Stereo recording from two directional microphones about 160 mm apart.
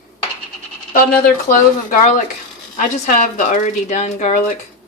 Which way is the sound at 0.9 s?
60° left (ahead or behind).